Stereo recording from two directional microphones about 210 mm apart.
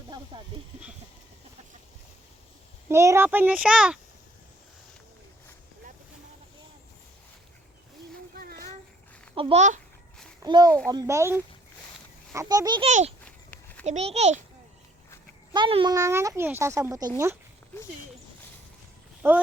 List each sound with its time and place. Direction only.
0.3 s a child's voice: 20° right (ahead or behind)
2.9 s speech: 15° right (ahead or behind)
9.3 s a child's voice: 25° right (ahead or behind)
10.4 s a child's voice: 20° right (ahead or behind)
12.9 s a child's voice: 35° right (ahead or behind)
13.2 s walk: 5° left (ahead or behind)
13.8 s a child's voice: 30° right (ahead or behind)
15.5 s speech: 25° right (ahead or behind)
19.2 s speech: 10° right (ahead or behind)